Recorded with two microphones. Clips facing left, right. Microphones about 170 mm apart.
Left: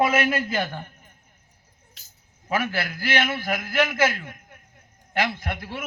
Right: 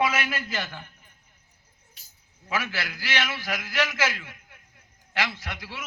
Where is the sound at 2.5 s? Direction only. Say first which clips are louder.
Left 5 dB; 50° left (ahead or behind).